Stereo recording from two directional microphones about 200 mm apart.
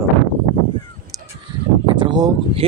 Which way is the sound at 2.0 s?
20° right (ahead or behind).